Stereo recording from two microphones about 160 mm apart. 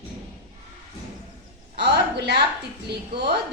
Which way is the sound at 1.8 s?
90° right.